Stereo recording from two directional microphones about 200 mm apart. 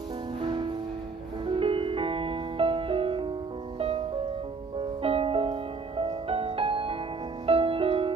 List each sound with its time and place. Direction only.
1.4 s music: 25° right (ahead or behind)
4.7 s music: 30° right (ahead or behind)